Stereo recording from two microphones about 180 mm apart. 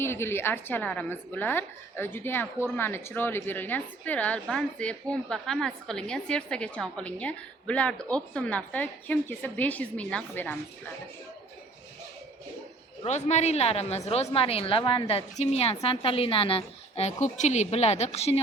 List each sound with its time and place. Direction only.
0.0 s a woman's voice: 15° left (ahead or behind)
13.0 s a woman's voice: 40° left (ahead or behind)